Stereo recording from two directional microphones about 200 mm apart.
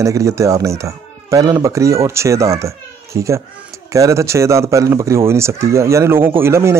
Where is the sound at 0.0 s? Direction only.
15° right (ahead or behind).